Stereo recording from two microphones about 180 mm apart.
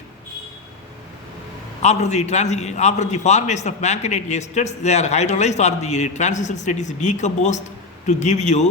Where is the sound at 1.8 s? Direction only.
40° left (ahead or behind).